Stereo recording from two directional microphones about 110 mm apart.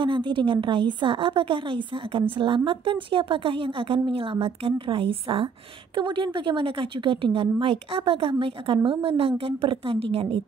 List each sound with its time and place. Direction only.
0.0 s a woman's voice: 50° right (ahead or behind)